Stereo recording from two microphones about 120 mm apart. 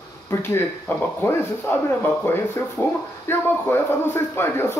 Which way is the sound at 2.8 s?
15° left (ahead or behind).